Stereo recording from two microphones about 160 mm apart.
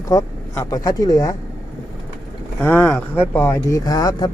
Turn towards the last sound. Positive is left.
turn(degrees=25)  # may be behind; listen again after turning